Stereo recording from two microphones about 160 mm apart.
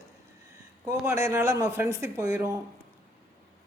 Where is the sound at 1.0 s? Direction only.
15° right (ahead or behind).